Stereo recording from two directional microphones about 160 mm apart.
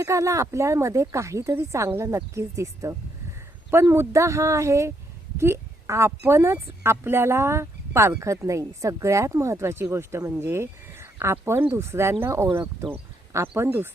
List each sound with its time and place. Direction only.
0.0 s speech: 20° right (ahead or behind)